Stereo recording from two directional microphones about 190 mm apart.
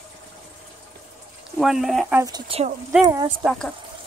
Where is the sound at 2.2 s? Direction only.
20° right (ahead or behind).